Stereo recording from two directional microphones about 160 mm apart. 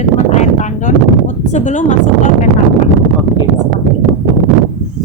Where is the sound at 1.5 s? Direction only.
50° left (ahead or behind).